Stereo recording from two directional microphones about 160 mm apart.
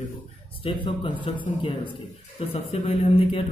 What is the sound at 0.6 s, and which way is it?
A man's voice, 30° left (ahead or behind).